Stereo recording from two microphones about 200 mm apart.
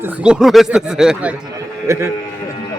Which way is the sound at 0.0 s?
5° right (ahead or behind).